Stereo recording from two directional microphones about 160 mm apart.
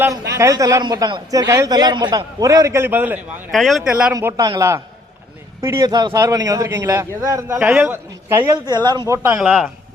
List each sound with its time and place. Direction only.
0.3 s a man's voice: 20° right (ahead or behind)
3.5 s speech: centre (ahead or behind)
4.1 s a man's voice: 20° right (ahead or behind)
8.5 s a man's voice: 25° right (ahead or behind)
9.4 s speech: 5° right (ahead or behind)